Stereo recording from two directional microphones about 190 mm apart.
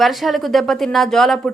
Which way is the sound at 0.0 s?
Centre (ahead or behind).